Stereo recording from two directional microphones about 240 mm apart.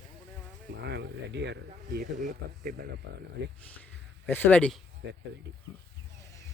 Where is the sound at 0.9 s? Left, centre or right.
Right.